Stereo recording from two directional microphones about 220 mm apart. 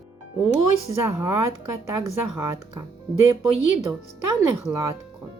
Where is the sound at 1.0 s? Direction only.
10° right (ahead or behind).